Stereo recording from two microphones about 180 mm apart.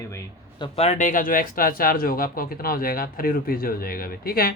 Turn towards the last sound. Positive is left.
turn(degrees=55)  # may be behind; listen again after turning